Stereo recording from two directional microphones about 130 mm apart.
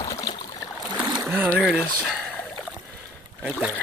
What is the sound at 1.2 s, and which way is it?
Rowboat, 15° right (ahead or behind).